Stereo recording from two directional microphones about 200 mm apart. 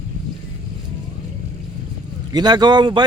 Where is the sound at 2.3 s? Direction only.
20° right (ahead or behind).